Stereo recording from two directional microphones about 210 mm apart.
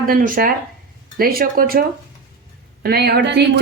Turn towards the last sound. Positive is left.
turn(degrees=-55)  # may be behind; listen again after turning